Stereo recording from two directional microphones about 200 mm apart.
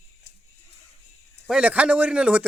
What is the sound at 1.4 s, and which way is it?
Speech, 5° right (ahead or behind).